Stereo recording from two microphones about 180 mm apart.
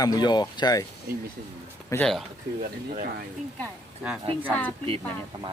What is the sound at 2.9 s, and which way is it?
Speech, 50° right (ahead or behind).